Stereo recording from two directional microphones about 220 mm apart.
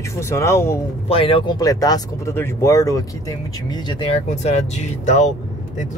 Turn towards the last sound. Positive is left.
turn(degrees=30)  # may be behind; listen again after turning